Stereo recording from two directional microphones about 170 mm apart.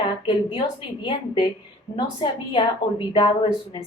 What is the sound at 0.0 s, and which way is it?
Speech, 30° left (ahead or behind).